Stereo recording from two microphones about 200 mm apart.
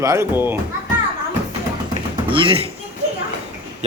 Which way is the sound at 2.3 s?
25° right (ahead or behind).